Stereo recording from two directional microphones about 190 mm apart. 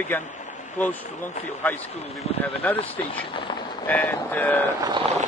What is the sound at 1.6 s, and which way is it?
A man's voice, 10° left (ahead or behind).